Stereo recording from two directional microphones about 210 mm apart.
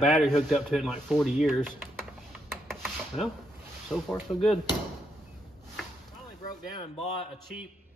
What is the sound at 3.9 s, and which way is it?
Speech, 5° left (ahead or behind).